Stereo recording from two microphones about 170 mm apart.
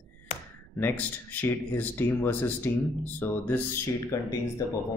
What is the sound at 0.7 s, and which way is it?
Speech, 10° left (ahead or behind).